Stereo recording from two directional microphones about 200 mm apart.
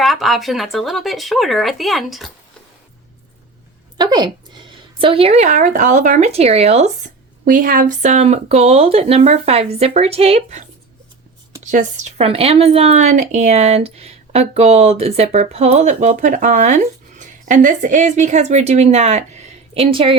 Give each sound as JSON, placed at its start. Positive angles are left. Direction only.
{"t": 0.0, "sound": "speech", "side_deg": 0}
{"t": 3.9, "sound": "speech", "side_deg": -20}